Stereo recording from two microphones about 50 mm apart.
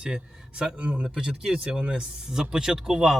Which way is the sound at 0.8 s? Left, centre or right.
Right.